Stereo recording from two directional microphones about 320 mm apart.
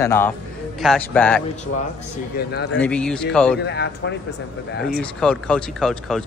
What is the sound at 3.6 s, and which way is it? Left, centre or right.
Speech, left.